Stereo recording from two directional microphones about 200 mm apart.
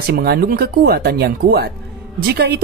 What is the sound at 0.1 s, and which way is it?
Speech, 50° right (ahead or behind).